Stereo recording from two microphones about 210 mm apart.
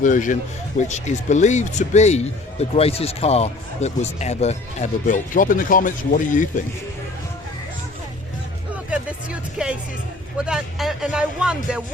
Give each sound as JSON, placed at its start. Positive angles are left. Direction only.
{"t": 0.0, "sound": "speech", "side_deg": 40}
{"t": 8.7, "sound": "music", "side_deg": -5}
{"t": 10.4, "sound": "speech", "side_deg": 0}